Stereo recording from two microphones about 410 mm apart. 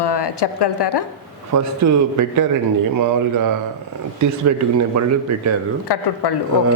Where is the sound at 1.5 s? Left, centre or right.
Right.